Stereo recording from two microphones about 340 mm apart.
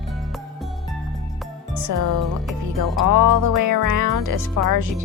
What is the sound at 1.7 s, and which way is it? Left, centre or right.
Speech, right.